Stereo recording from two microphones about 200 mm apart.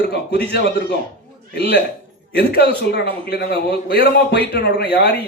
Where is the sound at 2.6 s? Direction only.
55° left (ahead or behind).